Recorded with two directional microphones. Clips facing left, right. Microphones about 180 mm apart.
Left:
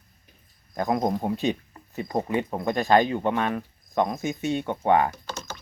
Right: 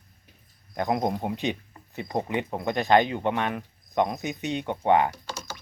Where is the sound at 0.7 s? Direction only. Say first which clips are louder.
Left 1 dB; 15° right (ahead or behind).